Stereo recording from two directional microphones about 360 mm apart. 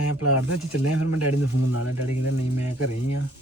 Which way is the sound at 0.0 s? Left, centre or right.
Left.